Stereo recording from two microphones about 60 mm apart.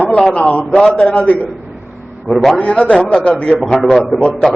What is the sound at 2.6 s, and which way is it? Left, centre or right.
A man's voice, centre.